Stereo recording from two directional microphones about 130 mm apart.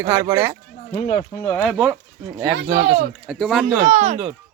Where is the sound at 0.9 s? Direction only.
55° left (ahead or behind).